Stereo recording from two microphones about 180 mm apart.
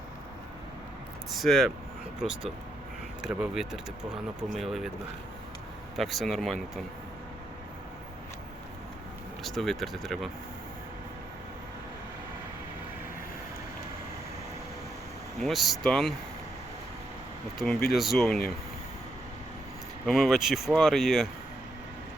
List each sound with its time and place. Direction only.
1.4 s speech: centre (ahead or behind)
3.2 s speech: 5° right (ahead or behind)
6.0 s speech: centre (ahead or behind)
9.4 s speech: centre (ahead or behind)
15.4 s speech: centre (ahead or behind)
17.9 s speech: centre (ahead or behind)
20.1 s speech: centre (ahead or behind)